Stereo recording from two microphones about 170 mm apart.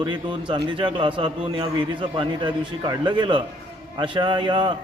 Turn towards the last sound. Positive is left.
turn(degrees=-30)  # may be behind; listen again after turning